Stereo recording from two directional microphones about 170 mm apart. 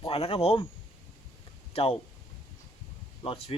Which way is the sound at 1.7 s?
35° left (ahead or behind).